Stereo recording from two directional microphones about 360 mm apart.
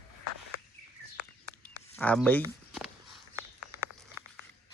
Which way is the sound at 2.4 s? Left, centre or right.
Centre.